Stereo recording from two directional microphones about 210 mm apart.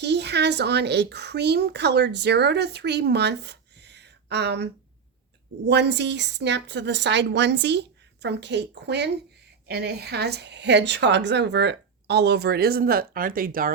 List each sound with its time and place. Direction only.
0.0 s a woman's voice: 55° right (ahead or behind)